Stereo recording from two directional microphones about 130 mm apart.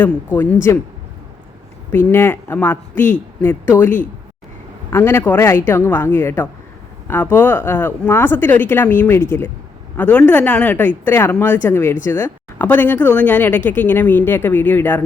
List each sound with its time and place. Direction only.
0.0 s speech: 15° left (ahead or behind)
1.9 s speech: 15° left (ahead or behind)